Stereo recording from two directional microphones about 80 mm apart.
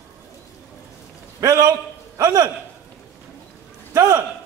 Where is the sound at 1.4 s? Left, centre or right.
Right.